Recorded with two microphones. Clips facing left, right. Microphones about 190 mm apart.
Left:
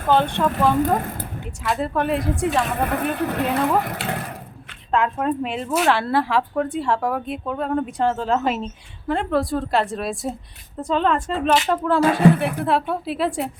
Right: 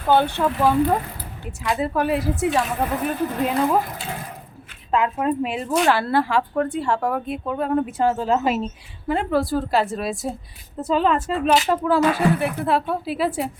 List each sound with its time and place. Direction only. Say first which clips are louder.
0.1 s speech: even; 5° right (ahead or behind)
0.8 s speech: even; 50° left (ahead or behind)
1.6 s a woman's voice: right 1 dB; centre (ahead or behind)
2.8 s speech: left 1 dB; 60° left (ahead or behind)
4.9 s a woman's voice: even; 5° right (ahead or behind)